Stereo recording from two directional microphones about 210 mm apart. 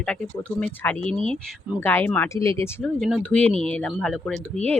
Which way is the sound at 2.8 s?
Centre (ahead or behind).